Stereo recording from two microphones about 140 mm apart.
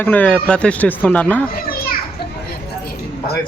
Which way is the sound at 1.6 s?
90° left.